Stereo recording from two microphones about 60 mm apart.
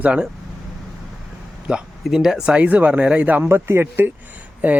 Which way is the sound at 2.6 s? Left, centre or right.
Right.